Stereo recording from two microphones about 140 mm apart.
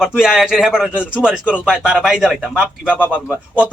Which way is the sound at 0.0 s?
5° right (ahead or behind).